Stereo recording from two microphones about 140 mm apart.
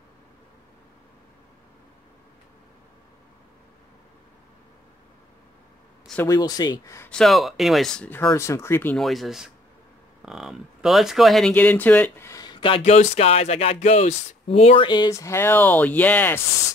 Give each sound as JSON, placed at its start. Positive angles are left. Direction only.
{"t": 6.2, "sound": "speech", "side_deg": 25}
{"t": 7.1, "sound": "speech", "side_deg": 5}
{"t": 8.1, "sound": "speech", "side_deg": 20}
{"t": 8.9, "sound": "speech", "side_deg": 0}
{"t": 12.5, "sound": "a sound", "side_deg": 40}
{"t": 12.8, "sound": "speech", "side_deg": 55}